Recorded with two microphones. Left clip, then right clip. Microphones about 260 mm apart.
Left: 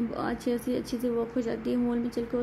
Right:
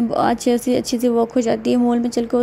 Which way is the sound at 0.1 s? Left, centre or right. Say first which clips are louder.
Right 13 dB; right.